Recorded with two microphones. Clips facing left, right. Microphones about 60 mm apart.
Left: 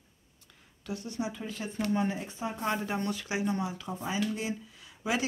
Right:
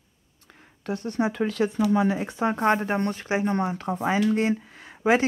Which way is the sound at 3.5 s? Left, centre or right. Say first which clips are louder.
Right 8 dB; right.